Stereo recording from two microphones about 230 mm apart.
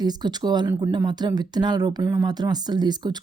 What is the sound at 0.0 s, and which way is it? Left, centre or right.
Speech, centre.